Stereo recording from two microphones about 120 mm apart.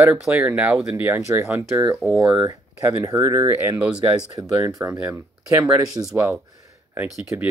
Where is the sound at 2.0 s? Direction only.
5° right (ahead or behind).